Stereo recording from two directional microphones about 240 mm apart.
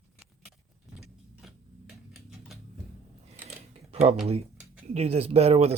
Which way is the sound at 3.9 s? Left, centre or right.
Right.